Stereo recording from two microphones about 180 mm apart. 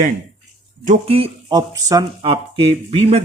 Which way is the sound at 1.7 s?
20° right (ahead or behind).